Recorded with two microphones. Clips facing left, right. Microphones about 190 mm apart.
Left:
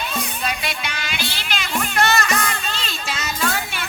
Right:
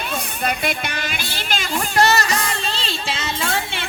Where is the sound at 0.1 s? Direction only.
55° right (ahead or behind).